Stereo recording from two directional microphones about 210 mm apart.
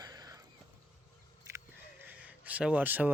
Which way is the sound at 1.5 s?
15° right (ahead or behind).